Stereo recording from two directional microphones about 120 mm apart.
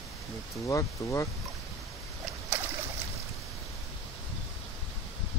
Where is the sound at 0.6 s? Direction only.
25° left (ahead or behind).